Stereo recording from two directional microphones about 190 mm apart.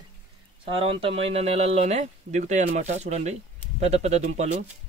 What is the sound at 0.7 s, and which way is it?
Speech, 30° right (ahead or behind).